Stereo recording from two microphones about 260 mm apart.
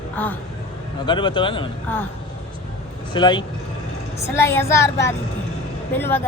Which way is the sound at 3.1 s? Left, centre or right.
Centre.